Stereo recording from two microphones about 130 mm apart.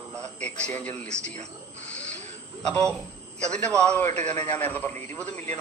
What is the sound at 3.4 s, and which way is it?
Speech, 10° left (ahead or behind).